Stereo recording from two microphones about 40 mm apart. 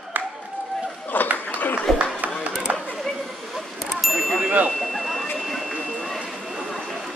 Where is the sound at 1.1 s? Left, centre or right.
Left.